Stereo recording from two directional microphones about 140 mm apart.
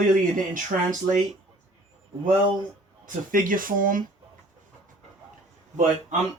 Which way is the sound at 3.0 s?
75° right (ahead or behind).